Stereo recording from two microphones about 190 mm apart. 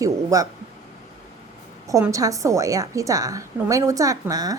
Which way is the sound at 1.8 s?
15° right (ahead or behind).